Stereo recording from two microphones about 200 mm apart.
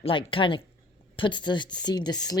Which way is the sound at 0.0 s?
25° left (ahead or behind).